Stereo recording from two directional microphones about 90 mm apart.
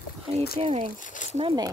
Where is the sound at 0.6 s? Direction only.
90° right.